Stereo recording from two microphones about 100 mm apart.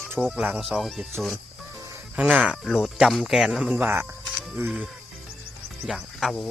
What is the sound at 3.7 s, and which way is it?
Speech, 20° right (ahead or behind).